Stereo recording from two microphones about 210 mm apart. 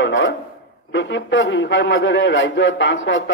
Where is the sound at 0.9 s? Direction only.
60° left (ahead or behind).